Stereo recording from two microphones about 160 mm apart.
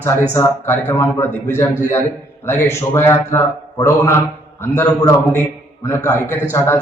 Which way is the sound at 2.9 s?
15° left (ahead or behind).